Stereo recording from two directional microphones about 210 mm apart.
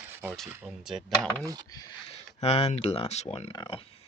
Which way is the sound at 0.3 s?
5° right (ahead or behind).